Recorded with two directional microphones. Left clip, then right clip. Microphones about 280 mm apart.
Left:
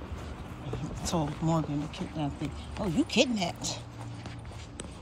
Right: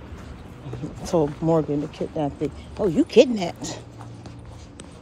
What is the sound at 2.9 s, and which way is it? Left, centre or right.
Speech, centre.